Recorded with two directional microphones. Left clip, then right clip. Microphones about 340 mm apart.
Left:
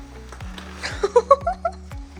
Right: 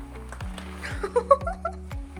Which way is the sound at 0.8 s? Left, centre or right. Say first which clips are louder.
Left 5 dB; centre.